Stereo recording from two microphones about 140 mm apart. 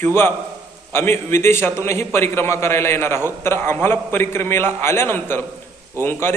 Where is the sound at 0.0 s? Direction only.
15° left (ahead or behind).